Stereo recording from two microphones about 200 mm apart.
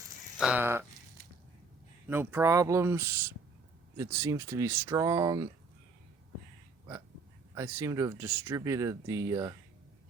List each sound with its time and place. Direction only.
0.3 s speech: 5° right (ahead or behind)
2.0 s speech: 10° right (ahead or behind)
7.5 s speech: 15° right (ahead or behind)